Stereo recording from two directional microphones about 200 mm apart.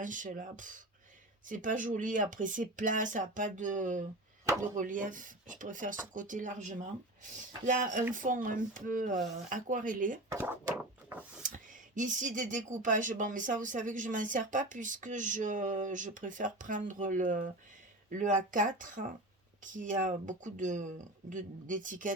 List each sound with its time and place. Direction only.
0.0 s speech: 40° right (ahead or behind)
10.3 s a sound: 10° right (ahead or behind)
11.4 s speech: 40° right (ahead or behind)